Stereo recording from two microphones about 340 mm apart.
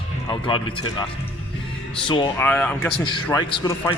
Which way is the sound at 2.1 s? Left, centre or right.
Centre.